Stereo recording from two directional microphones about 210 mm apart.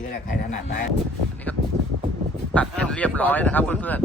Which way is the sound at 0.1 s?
35° left (ahead or behind).